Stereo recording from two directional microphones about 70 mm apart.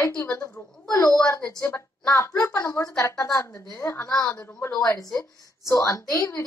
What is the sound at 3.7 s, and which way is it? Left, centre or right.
Speech, left.